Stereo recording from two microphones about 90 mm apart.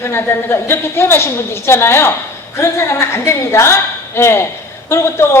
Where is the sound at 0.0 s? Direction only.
30° left (ahead or behind).